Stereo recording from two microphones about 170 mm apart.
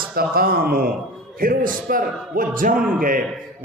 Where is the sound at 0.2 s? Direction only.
60° right (ahead or behind).